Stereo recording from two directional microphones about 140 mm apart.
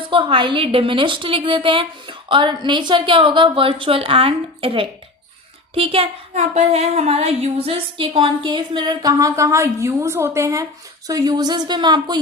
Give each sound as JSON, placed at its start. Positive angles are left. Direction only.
{"t": 0.1, "sound": "speech", "side_deg": -40}